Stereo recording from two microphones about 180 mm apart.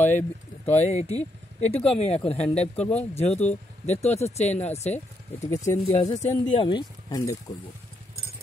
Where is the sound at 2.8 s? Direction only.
5° left (ahead or behind).